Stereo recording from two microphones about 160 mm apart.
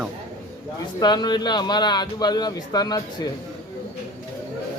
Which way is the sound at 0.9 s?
25° left (ahead or behind).